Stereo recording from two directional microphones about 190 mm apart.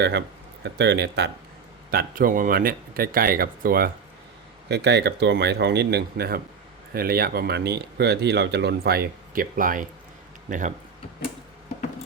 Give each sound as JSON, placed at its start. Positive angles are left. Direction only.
{"t": 0.6, "sound": "speech", "side_deg": -65}
{"t": 1.9, "sound": "speech", "side_deg": -50}
{"t": 4.7, "sound": "speech", "side_deg": -65}